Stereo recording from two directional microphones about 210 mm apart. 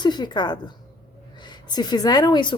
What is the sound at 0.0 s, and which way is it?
A woman's voice, 20° left (ahead or behind).